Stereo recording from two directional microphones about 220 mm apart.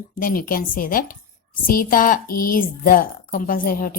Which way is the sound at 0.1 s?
40° left (ahead or behind).